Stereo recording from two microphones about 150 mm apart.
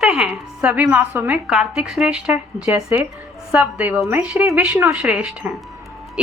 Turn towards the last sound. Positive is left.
turn(degrees=-10)  # may be behind; listen again after turning